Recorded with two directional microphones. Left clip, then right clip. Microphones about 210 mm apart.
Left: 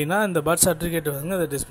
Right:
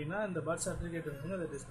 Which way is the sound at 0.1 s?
45° left (ahead or behind).